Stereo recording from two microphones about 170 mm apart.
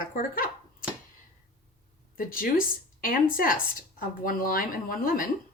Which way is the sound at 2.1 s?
55° left (ahead or behind).